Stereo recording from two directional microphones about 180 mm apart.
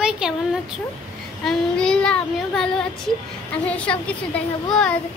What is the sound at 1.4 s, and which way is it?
A child's voice, 5° left (ahead or behind).